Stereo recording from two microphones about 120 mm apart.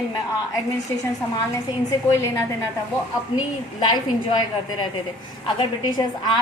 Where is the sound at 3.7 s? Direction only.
35° left (ahead or behind).